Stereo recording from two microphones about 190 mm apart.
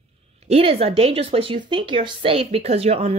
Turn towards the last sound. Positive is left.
turn(degrees=-30)  # may be behind; listen again after turning